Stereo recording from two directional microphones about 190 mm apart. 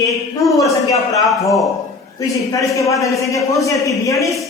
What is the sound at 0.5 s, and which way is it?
Speech, 15° left (ahead or behind).